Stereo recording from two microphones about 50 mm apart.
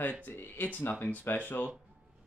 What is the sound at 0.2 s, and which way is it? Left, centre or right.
Speech, left.